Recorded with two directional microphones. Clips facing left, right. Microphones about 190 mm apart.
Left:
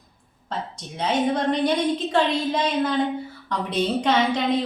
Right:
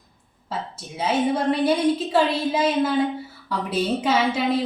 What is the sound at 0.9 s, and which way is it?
A woman's voice, 5° right (ahead or behind).